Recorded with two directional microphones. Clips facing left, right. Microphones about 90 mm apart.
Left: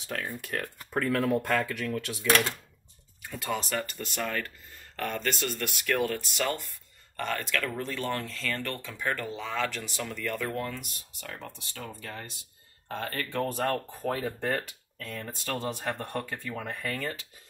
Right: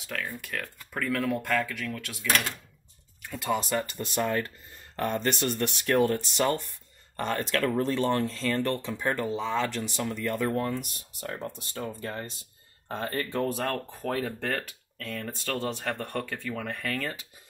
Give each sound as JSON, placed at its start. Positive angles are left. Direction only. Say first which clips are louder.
{"t": 0.0, "sound": "speech", "louder": "even", "side_deg": 35}
{"t": 3.2, "sound": "a sound", "louder": "right 1 dB", "side_deg": 0}
{"t": 3.4, "sound": "speech", "louder": "right 4 dB", "side_deg": -15}
{"t": 11.3, "sound": "speech", "louder": "right 5 dB", "side_deg": -40}
{"t": 13.5, "sound": "speech", "louder": "left 1 dB", "side_deg": 0}